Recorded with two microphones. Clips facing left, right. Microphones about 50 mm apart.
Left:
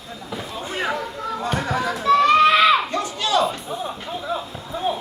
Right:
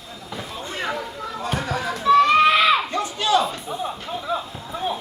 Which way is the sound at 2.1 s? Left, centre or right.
Centre.